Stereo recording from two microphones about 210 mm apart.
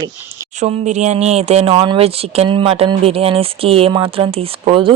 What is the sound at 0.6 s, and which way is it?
Speech, 35° right (ahead or behind).